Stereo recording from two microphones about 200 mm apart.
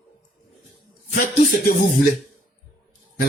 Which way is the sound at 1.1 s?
45° left (ahead or behind).